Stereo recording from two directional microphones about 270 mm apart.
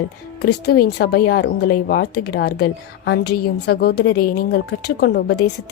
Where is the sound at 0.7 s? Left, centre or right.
Left.